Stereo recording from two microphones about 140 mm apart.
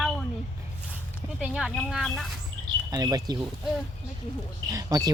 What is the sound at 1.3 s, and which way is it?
Speech, 5° right (ahead or behind).